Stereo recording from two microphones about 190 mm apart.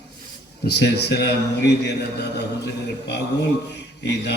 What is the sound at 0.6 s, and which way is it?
A man's voice, 60° left (ahead or behind).